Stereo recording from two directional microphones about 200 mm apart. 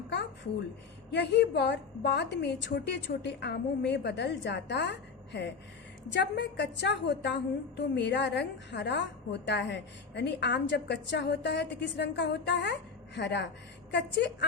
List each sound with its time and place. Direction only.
1.1 s a woman's voice: 60° left (ahead or behind)